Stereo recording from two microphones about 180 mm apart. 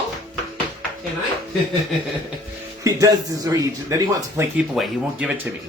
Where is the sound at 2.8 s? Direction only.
20° right (ahead or behind).